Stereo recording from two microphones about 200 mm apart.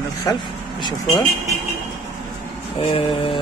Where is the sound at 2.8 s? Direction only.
25° left (ahead or behind).